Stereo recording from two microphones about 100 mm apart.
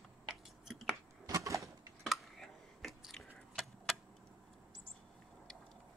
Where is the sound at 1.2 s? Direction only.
30° right (ahead or behind).